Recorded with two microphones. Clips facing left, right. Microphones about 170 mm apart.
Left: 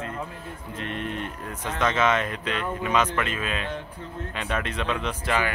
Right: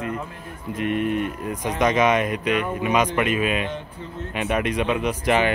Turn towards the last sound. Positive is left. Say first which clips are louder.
# right 6 dB
turn(degrees=-20)  # may be behind; listen again after turning